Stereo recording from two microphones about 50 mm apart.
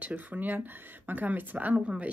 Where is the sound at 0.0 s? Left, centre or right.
Right.